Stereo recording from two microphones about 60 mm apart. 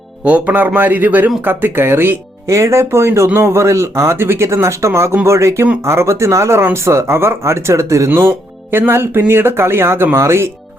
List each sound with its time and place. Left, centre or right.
0.3 s speech: right
2.5 s speech: right
8.9 s speech: right